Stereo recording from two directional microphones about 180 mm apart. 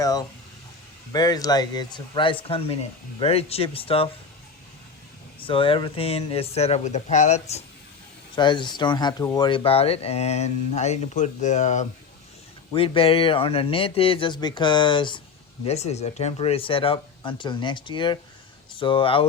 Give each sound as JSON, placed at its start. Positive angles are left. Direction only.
{"t": 0.0, "sound": "a sound", "side_deg": 20}
{"t": 1.1, "sound": "speech", "side_deg": 20}
{"t": 5.4, "sound": "speech", "side_deg": 30}
{"t": 8.4, "sound": "speech", "side_deg": 25}
{"t": 12.7, "sound": "speech", "side_deg": 30}
{"t": 15.6, "sound": "speech", "side_deg": 35}